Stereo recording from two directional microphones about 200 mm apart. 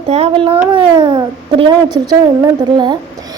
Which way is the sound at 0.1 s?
30° right (ahead or behind).